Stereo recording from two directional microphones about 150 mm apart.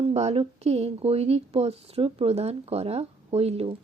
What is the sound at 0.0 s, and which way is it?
Speech, 45° right (ahead or behind).